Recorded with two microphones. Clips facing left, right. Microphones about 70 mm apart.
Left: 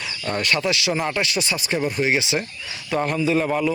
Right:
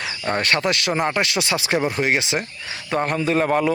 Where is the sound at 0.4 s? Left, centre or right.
Right.